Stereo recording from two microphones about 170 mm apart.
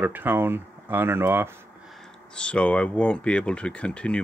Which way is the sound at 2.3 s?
5° left (ahead or behind).